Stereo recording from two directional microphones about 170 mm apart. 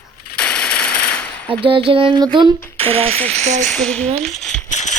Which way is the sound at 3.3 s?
40° right (ahead or behind).